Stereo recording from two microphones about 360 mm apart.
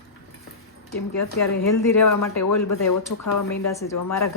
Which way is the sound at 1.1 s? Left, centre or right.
Left.